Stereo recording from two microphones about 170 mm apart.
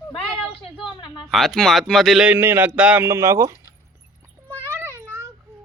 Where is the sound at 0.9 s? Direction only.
25° left (ahead or behind).